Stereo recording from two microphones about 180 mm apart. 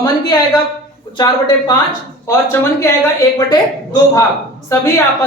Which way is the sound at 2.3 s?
15° left (ahead or behind).